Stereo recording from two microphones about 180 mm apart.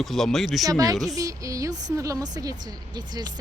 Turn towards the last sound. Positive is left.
turn(degrees=-25)  # may be behind; listen again after turning